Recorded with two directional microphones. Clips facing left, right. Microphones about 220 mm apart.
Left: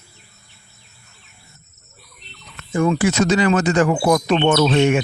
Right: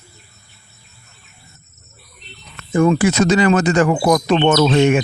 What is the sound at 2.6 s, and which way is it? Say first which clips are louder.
Speech: right 4 dB; 70° right (ahead or behind).